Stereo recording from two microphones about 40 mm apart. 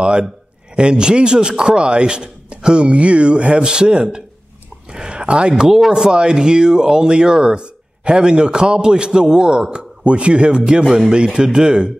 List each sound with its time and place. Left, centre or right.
0.0 s speech: right
5.5 s speech: centre